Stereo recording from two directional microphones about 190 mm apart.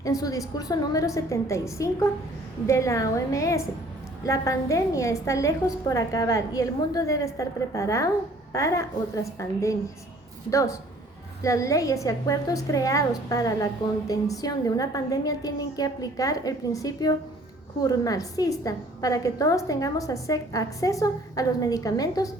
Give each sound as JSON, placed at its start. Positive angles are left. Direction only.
{"t": 0.0, "sound": "a woman's voice", "side_deg": 20}